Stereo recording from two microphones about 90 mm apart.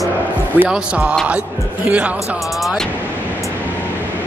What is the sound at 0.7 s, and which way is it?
Speech, 10° right (ahead or behind).